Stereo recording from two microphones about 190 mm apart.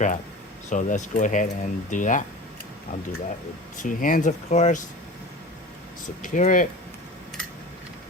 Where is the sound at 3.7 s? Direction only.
45° left (ahead or behind).